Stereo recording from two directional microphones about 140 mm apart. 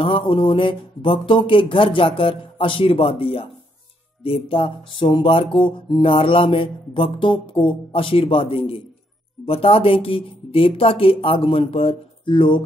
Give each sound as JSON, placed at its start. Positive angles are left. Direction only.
{"t": 0.0, "sound": "music", "side_deg": 40}